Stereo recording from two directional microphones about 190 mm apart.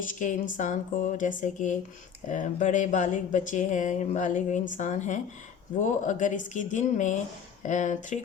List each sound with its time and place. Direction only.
0.1 s speech: 40° left (ahead or behind)